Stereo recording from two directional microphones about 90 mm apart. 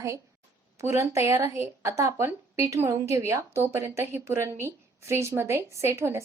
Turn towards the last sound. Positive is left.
turn(degrees=-30)  # may be behind; listen again after turning